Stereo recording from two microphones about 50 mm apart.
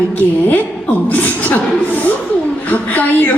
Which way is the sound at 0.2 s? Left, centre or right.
Left.